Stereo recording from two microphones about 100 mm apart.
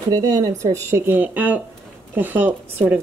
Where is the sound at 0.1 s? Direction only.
35° right (ahead or behind).